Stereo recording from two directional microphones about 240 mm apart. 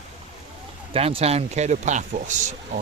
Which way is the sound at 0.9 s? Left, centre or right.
Right.